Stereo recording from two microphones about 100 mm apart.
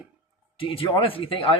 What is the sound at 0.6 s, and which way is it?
Speech, 65° left (ahead or behind).